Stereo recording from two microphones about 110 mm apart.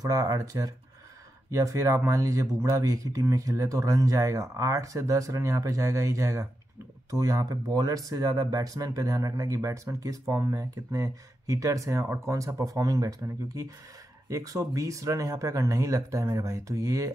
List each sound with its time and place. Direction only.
0.0 s speech: 30° right (ahead or behind)